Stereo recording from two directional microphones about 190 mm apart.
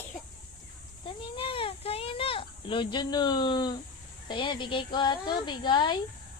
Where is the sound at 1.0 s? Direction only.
25° left (ahead or behind).